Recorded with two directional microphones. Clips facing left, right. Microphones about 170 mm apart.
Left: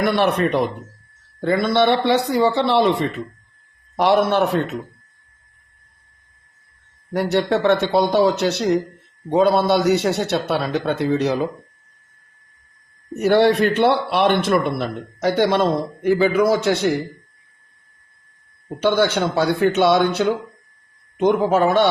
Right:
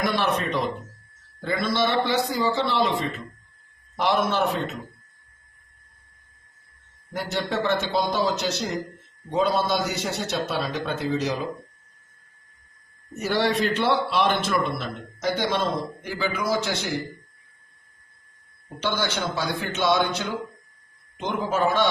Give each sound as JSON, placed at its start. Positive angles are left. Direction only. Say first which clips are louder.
{"t": 0.0, "sound": "a man's voice", "louder": "left 7 dB", "side_deg": 65}
{"t": 7.1, "sound": "a man's voice", "louder": "left 9 dB", "side_deg": 65}
{"t": 13.1, "sound": "a man's voice", "louder": "left 9 dB", "side_deg": 60}
{"t": 18.8, "sound": "a man's voice", "louder": "left 9 dB", "side_deg": 55}